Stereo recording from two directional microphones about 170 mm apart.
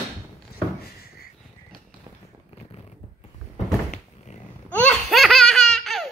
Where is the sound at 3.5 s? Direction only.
40° left (ahead or behind).